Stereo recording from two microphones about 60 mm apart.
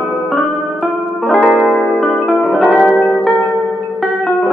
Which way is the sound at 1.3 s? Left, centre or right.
Centre.